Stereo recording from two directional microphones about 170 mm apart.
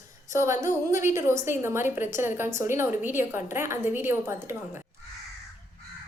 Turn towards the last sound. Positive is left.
turn(degrees=-15)  # may be behind; listen again after turning